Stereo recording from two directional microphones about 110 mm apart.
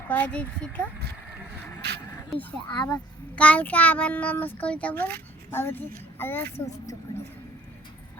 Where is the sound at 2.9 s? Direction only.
10° left (ahead or behind).